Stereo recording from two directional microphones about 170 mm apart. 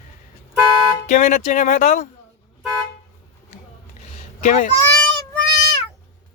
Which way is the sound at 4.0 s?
45° left (ahead or behind).